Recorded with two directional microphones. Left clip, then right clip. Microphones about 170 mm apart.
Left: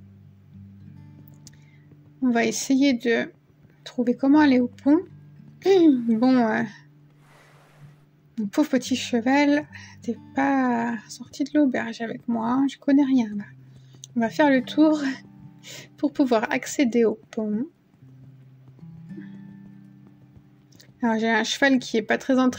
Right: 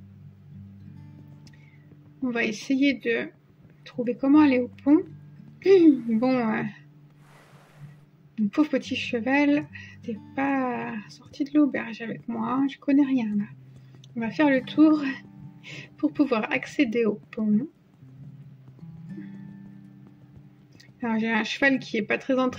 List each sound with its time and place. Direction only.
0.9 s music: centre (ahead or behind)
2.3 s speech: 45° left (ahead or behind)
8.4 s speech: 40° left (ahead or behind)
18.8 s music: centre (ahead or behind)
21.0 s speech: 40° left (ahead or behind)